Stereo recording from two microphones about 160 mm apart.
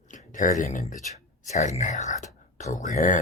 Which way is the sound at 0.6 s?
50° left (ahead or behind).